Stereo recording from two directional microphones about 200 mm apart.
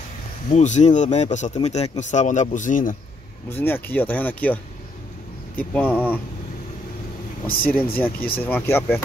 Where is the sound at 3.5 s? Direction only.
10° left (ahead or behind).